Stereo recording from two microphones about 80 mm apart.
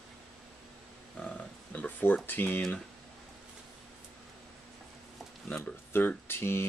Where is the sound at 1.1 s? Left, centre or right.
Centre.